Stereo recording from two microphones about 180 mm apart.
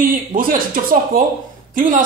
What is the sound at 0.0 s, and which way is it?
Speech, 50° right (ahead or behind).